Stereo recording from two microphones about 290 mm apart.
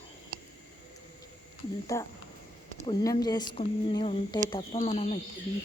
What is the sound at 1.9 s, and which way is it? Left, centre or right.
Speech, centre.